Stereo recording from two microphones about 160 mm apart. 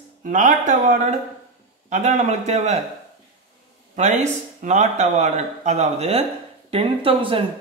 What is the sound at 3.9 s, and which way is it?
Speech, 45° right (ahead or behind).